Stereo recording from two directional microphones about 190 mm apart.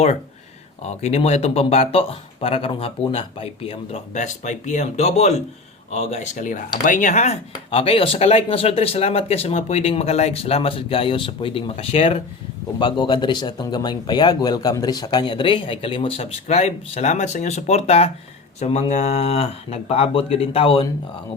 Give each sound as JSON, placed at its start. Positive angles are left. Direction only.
{"t": 0.9, "sound": "speech", "side_deg": 35}